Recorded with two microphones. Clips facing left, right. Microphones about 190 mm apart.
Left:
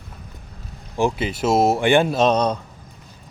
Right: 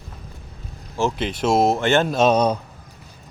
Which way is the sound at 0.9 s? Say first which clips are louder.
Left 2 dB; 10° left (ahead or behind).